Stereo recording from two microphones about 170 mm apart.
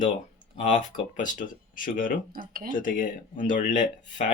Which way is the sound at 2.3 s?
60° right (ahead or behind).